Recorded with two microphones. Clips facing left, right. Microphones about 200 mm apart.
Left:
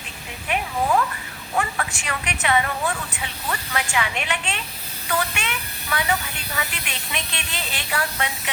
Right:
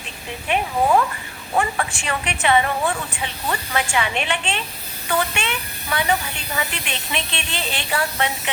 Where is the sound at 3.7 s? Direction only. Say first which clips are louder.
Right 3 dB; 30° right (ahead or behind).